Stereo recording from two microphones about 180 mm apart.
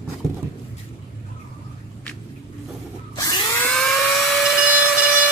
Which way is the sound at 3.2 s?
20° left (ahead or behind).